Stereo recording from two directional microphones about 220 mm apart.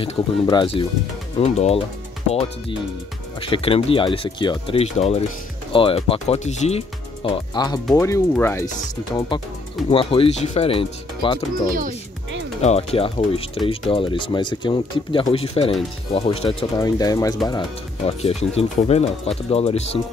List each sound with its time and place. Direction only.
0.0 s speech: 20° left (ahead or behind)
3.3 s speech: 25° left (ahead or behind)
7.2 s speech: 20° left (ahead or behind)
9.3 s speech: 20° left (ahead or behind)
16.7 s speech: 15° left (ahead or behind)